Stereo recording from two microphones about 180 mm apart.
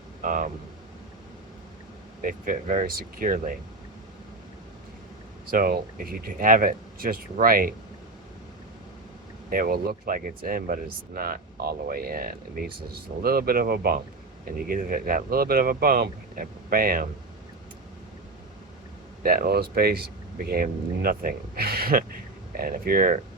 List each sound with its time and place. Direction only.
0.2 s a sound: 50° right (ahead or behind)
2.2 s speech: 50° right (ahead or behind)
5.5 s speech: 55° right (ahead or behind)
9.5 s speech: 55° right (ahead or behind)
19.2 s speech: 55° right (ahead or behind)